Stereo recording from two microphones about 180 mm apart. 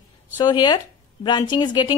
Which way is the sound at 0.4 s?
25° left (ahead or behind).